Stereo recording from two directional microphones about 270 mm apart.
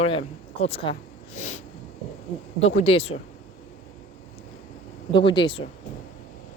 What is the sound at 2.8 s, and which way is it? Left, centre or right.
Speech, left.